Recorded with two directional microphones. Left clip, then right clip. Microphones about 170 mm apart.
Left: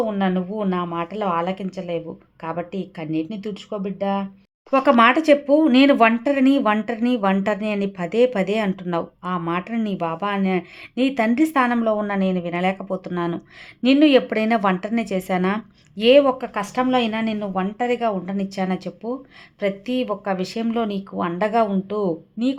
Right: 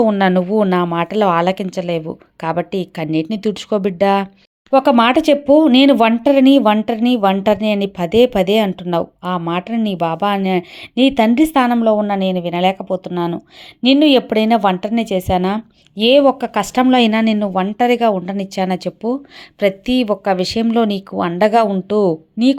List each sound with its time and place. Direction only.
0.0 s a woman's voice: 45° right (ahead or behind)
4.7 s a woman's voice: 20° right (ahead or behind); by 22.5 s 35° right (ahead or behind)